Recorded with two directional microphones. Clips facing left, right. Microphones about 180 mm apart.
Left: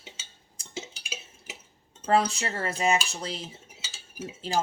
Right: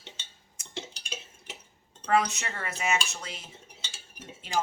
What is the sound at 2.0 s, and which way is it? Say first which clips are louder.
Speech: left 2 dB; 30° left (ahead or behind).